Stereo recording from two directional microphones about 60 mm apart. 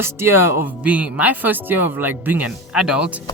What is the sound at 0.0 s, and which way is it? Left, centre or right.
Music, right.